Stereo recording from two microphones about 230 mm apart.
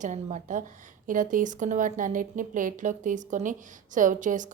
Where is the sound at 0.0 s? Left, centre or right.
Right.